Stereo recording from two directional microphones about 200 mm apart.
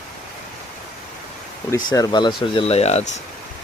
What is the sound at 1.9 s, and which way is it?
Speech, 20° left (ahead or behind).